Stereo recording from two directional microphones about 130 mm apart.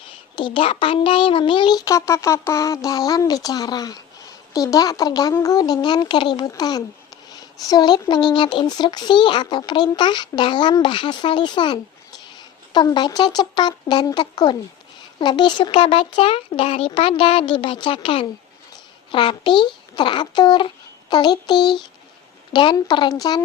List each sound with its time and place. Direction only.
0.3 s speech: 40° left (ahead or behind)